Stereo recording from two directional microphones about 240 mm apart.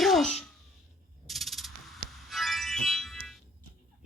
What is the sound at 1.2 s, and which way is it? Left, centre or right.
Music, centre.